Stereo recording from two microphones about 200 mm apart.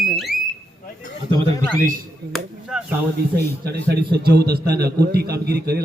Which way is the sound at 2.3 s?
Centre (ahead or behind).